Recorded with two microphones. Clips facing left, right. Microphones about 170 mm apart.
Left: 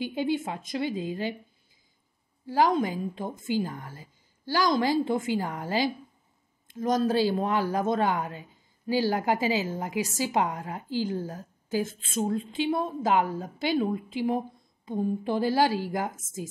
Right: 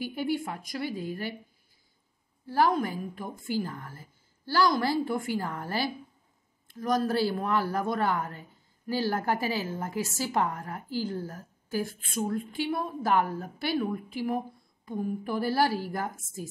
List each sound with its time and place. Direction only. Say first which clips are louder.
0.0 s a woman's voice: left 2 dB; 20° left (ahead or behind)
2.4 s a woman's voice: left 2 dB; 15° left (ahead or behind)